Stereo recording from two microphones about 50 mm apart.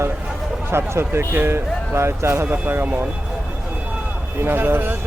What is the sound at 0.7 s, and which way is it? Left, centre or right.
Speech, right.